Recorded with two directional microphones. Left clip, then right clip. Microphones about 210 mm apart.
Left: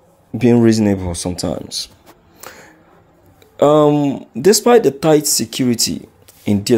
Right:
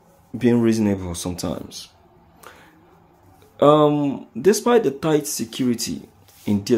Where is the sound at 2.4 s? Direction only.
30° left (ahead or behind).